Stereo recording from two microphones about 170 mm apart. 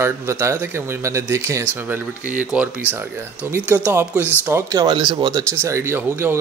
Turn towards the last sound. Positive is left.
turn(degrees=-15)  # may be behind; listen again after turning